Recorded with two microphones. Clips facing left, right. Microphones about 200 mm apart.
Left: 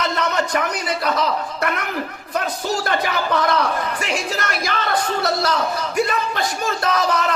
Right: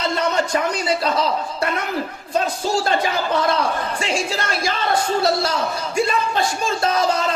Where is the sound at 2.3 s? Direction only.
25° right (ahead or behind).